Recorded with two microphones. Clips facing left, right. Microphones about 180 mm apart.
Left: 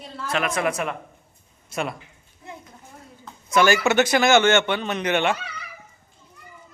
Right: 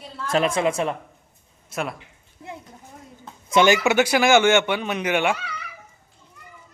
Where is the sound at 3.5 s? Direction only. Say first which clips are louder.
Right 1 dB; 20° right (ahead or behind).